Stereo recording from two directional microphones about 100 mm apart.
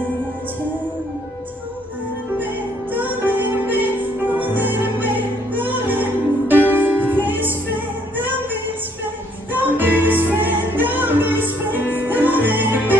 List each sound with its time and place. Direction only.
2.3 s music: 20° right (ahead or behind)
9.5 s music: 20° right (ahead or behind)
11.7 s music: 20° left (ahead or behind)
12.0 s music: 20° right (ahead or behind)